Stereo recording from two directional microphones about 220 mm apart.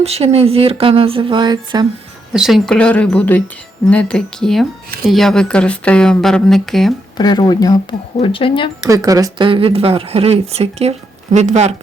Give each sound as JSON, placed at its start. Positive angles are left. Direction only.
{"t": 0.0, "sound": "speech", "side_deg": -30}
{"t": 2.3, "sound": "speech", "side_deg": 0}
{"t": 7.2, "sound": "speech", "side_deg": 20}
{"t": 8.9, "sound": "speech", "side_deg": -15}